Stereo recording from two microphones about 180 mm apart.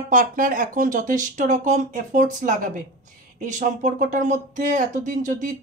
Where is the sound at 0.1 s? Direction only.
50° right (ahead or behind).